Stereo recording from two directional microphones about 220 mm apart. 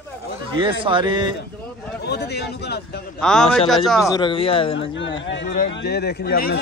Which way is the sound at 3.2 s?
5° left (ahead or behind).